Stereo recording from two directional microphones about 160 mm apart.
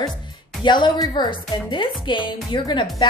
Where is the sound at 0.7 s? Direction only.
30° left (ahead or behind).